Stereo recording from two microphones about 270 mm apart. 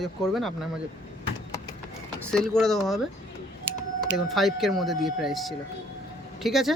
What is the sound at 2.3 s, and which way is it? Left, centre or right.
Speech, centre.